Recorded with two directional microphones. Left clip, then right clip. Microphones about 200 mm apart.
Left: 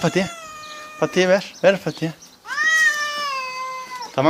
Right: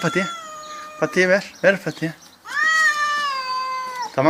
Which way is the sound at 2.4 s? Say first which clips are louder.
Even; 50° left (ahead or behind).